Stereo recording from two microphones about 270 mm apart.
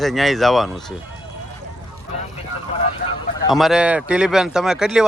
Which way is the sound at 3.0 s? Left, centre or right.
Left.